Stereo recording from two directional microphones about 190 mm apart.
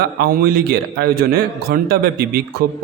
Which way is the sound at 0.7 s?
55° right (ahead or behind).